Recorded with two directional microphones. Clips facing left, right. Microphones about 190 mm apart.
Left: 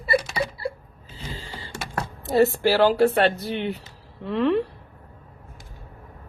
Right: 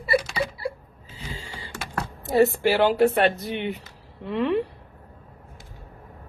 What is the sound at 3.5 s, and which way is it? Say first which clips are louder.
Speech: left 1 dB; centre (ahead or behind).